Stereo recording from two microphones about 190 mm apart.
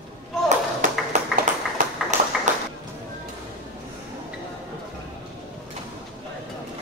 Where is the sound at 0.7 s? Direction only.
40° right (ahead or behind).